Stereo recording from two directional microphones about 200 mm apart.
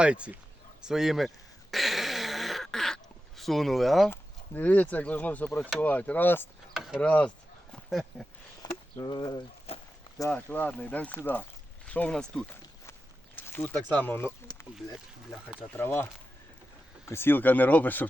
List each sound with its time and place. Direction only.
0.0 s speech: 5° right (ahead or behind)
1.7 s a sound: centre (ahead or behind)
4.1 s speech: 10° left (ahead or behind)
6.7 s a sound: centre (ahead or behind)
8.6 s speech: 20° left (ahead or behind)
10.2 s speech: 10° left (ahead or behind)
15.3 s speech: centre (ahead or behind)
15.7 s speech: 10° left (ahead or behind)
17.1 s speech: 10° left (ahead or behind)